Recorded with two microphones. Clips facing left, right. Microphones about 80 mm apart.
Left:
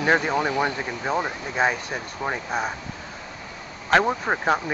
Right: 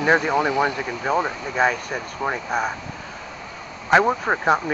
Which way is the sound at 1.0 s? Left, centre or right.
Centre.